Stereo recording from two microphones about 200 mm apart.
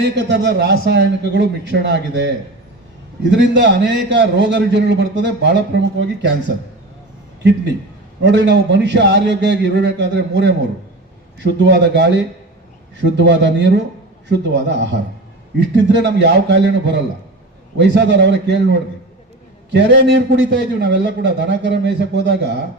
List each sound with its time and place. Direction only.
0.0 s a man's voice: 60° right (ahead or behind)
8.2 s a man's voice: 60° right (ahead or behind)